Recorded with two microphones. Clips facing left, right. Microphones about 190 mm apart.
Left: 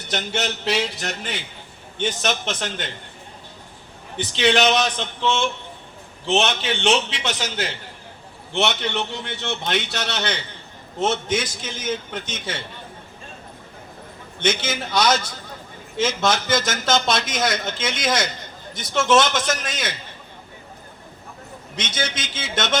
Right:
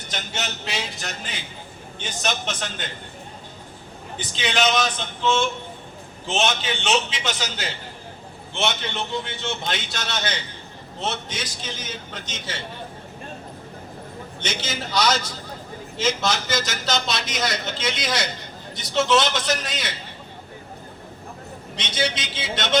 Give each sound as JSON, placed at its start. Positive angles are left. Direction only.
{"t": 0.1, "sound": "a man's voice", "side_deg": 65}
{"t": 4.3, "sound": "speech", "side_deg": 65}
{"t": 6.8, "sound": "a man's voice", "side_deg": 65}
{"t": 11.0, "sound": "a man's voice", "side_deg": 50}
{"t": 14.4, "sound": "a man's voice", "side_deg": 55}
{"t": 21.8, "sound": "a man's voice", "side_deg": 50}